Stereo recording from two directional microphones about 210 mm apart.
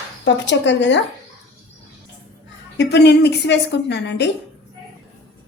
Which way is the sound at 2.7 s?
50° left (ahead or behind).